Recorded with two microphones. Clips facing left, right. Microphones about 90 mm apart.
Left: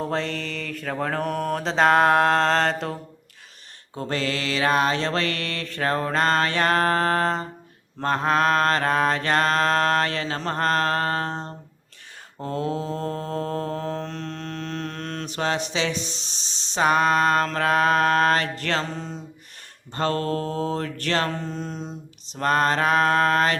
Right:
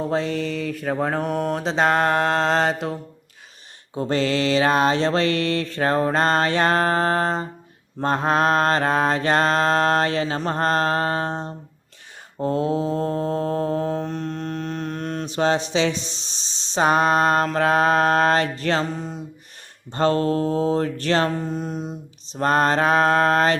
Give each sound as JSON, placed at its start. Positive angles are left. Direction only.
{"t": 0.0, "sound": "mantra", "side_deg": -5}
{"t": 3.9, "sound": "music", "side_deg": -15}
{"t": 4.2, "sound": "mantra", "side_deg": -25}
{"t": 15.4, "sound": "mantra", "side_deg": -25}
{"t": 18.6, "sound": "music", "side_deg": -15}
{"t": 19.9, "sound": "mantra", "side_deg": -25}
{"t": 21.2, "sound": "music", "side_deg": -10}
{"t": 22.4, "sound": "mantra", "side_deg": -30}